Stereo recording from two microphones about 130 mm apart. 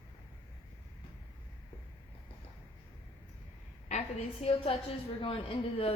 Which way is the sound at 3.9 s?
50° left (ahead or behind).